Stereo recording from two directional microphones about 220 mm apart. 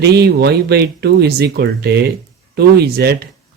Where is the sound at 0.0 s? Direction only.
45° right (ahead or behind).